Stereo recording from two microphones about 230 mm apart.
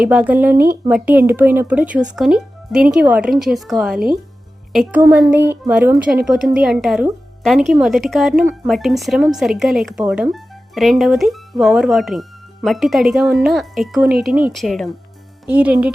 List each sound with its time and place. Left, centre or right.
0.0 s a woman's voice: centre